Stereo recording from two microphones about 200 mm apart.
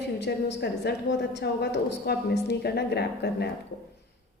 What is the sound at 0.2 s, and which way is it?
A woman's voice, 55° left (ahead or behind).